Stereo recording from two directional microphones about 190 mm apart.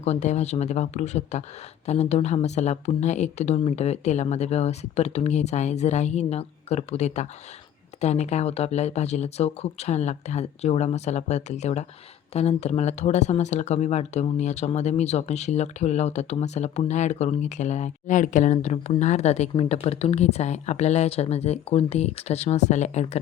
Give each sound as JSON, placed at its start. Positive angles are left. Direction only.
{"t": 0.0, "sound": "speech", "side_deg": 35}